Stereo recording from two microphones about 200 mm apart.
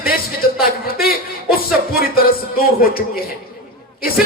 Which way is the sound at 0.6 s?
50° left (ahead or behind).